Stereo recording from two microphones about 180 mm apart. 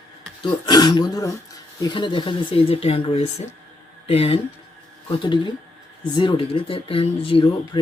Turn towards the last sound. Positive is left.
turn(degrees=30)  # may be behind; listen again after turning